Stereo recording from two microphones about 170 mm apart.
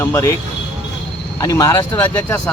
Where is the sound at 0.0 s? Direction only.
15° left (ahead or behind).